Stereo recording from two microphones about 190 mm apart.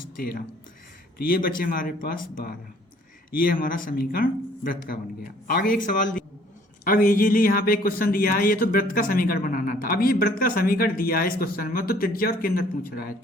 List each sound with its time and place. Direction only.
0.2 s speech: 50° left (ahead or behind)